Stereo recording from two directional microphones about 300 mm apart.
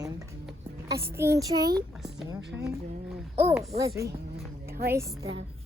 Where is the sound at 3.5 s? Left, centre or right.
Centre.